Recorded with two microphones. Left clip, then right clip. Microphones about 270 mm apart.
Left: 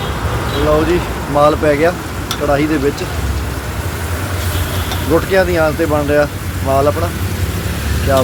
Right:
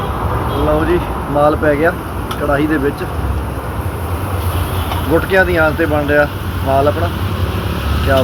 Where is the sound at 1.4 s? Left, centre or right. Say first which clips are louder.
Left 1 dB; centre.